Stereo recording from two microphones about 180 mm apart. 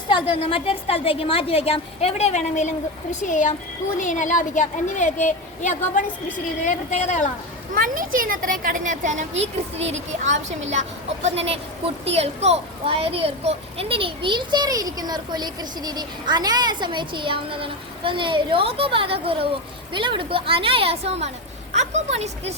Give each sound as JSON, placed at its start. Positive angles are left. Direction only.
{"t": 0.1, "sound": "a woman's voice", "side_deg": 30}
{"t": 7.7, "sound": "a child's voice", "side_deg": -50}